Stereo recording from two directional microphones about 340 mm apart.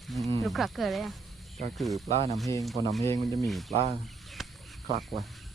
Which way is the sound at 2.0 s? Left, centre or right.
Centre.